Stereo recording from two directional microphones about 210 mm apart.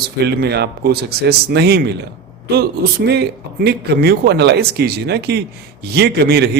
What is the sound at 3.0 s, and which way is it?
Speech, 50° right (ahead or behind).